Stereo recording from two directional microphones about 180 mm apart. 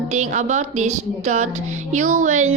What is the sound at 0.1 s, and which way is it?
A woman's voice, 40° right (ahead or behind).